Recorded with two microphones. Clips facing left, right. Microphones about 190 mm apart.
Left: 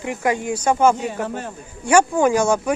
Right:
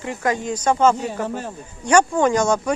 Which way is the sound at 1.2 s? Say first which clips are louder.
Right 1 dB; centre (ahead or behind).